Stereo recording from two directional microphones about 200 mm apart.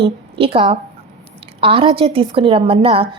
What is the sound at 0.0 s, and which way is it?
A woman's voice, 30° right (ahead or behind).